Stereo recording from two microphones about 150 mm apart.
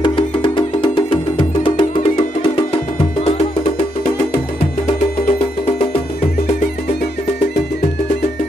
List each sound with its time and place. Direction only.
0.0 s music: 30° left (ahead or behind)